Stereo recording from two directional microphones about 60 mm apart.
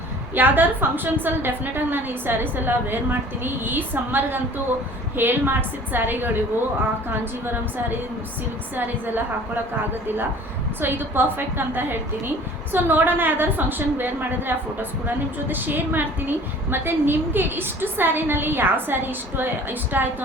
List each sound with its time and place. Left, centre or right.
0.3 s a woman's voice: right
10.8 s a woman's voice: right